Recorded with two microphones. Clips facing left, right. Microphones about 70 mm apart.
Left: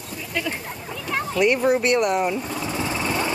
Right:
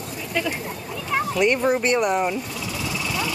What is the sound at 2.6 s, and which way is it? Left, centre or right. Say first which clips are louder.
Light engine: left 3 dB; left.